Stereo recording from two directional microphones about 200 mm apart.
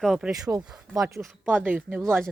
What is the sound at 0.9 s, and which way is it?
Speech, 15° right (ahead or behind).